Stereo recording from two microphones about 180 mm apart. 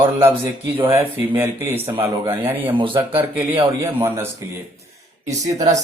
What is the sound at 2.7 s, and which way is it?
Speech, 30° right (ahead or behind).